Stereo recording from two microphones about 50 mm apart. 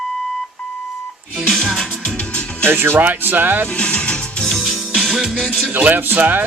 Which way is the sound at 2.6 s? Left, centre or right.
Right.